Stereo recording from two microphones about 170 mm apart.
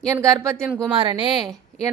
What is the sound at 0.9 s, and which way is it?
Speech, 30° right (ahead or behind).